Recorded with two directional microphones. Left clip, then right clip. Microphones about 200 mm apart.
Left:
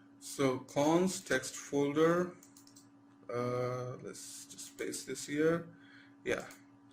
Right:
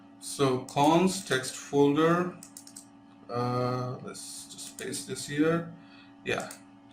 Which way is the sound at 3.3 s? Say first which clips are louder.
Right 5 dB; 45° left (ahead or behind).